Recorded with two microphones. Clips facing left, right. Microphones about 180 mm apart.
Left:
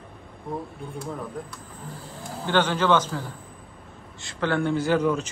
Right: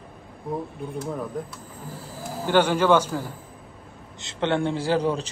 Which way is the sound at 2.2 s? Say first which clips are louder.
Right 3 dB; 10° right (ahead or behind).